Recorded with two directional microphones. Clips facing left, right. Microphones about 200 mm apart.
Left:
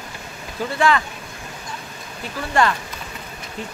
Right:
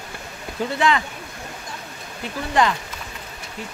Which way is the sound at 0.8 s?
20° right (ahead or behind).